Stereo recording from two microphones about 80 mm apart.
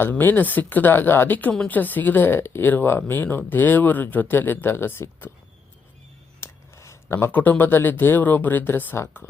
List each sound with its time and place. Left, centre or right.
0.0 s speech: left
6.4 s speech: left